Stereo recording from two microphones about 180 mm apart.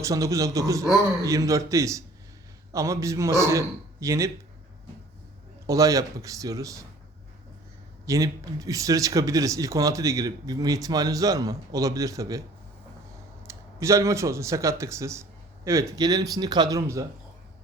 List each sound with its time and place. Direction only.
0.0 s a man's voice: 20° right (ahead or behind)
5.6 s speech: 20° right (ahead or behind)
8.0 s speech: 20° right (ahead or behind)
13.5 s speech: 15° right (ahead or behind)